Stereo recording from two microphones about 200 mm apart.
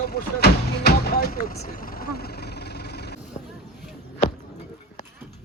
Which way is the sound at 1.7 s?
45° left (ahead or behind).